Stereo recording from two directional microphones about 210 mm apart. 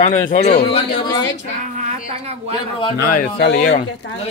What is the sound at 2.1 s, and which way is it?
Speech, 30° right (ahead or behind).